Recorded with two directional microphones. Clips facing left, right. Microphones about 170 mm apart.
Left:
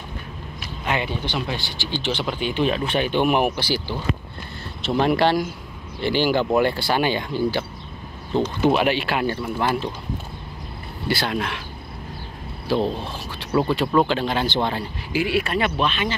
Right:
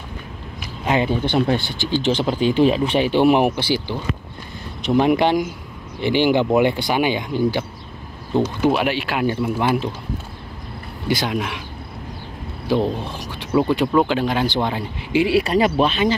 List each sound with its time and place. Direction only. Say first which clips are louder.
0.8 s speech: right 6 dB; 35° right (ahead or behind)
1.2 s speech: right 8 dB; 55° right (ahead or behind); by 9.8 s 15° right (ahead or behind)
11.1 s speech: right 2 dB; 15° right (ahead or behind)
12.6 s speech: right 2 dB; 15° right (ahead or behind)
13.5 s speech: right 3 dB; 5° right (ahead or behind)
15.1 s speech: right 5 dB; 30° right (ahead or behind)